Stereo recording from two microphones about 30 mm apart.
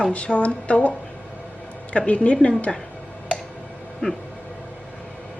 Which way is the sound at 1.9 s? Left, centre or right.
Left.